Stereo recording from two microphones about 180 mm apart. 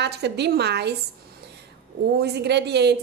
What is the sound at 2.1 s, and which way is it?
Speech, 65° right (ahead or behind).